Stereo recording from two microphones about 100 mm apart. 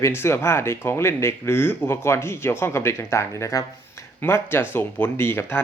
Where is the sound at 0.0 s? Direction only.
25° left (ahead or behind).